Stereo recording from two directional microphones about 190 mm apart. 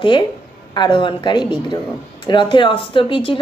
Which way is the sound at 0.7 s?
25° left (ahead or behind).